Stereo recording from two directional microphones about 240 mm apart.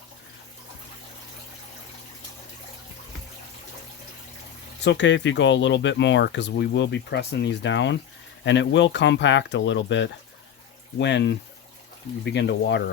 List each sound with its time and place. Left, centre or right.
4.8 s speech: left